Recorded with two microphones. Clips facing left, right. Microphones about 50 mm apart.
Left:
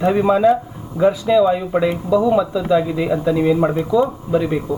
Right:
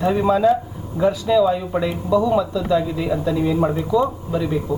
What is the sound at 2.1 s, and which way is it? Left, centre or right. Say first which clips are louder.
Speech: left 1 dB; centre.